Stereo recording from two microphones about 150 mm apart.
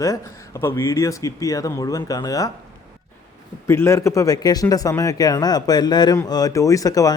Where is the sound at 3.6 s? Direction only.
15° left (ahead or behind).